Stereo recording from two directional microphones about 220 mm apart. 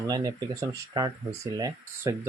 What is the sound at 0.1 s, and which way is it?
Speech, 15° right (ahead or behind).